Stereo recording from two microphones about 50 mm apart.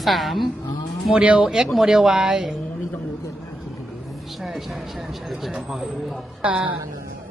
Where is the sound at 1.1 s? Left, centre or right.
Right.